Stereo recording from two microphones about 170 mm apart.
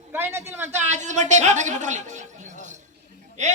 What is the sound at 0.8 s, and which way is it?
A man's voice, 45° right (ahead or behind).